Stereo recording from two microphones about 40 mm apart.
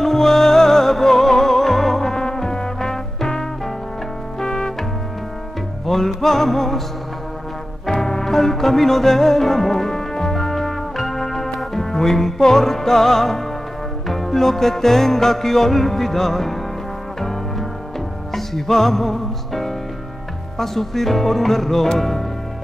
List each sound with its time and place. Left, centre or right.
0.0 s music: centre
5.9 s music: centre
7.8 s music: centre